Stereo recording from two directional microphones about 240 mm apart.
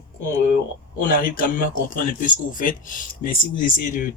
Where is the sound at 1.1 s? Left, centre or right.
Left.